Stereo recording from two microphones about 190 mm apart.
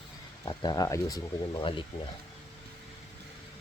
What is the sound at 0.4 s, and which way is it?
Speech, 20° left (ahead or behind).